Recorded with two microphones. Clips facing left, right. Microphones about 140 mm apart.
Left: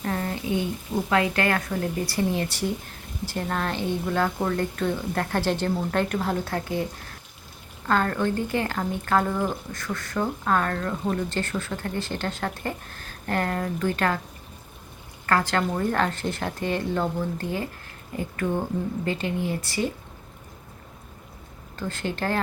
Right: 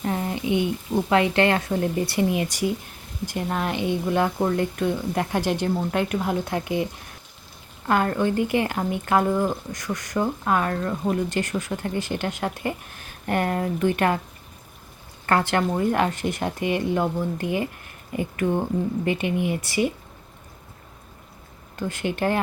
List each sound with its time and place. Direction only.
0.0 s speech: 20° right (ahead or behind)
7.9 s speech: 15° right (ahead or behind)
15.3 s speech: 20° right (ahead or behind)
21.8 s speech: 15° right (ahead or behind)